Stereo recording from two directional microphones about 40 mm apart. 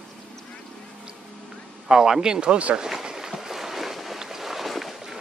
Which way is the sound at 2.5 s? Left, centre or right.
Right.